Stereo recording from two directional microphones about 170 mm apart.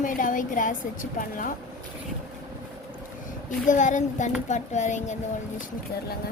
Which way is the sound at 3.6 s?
45° left (ahead or behind).